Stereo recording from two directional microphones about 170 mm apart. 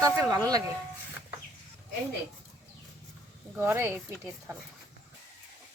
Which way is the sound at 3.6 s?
15° right (ahead or behind).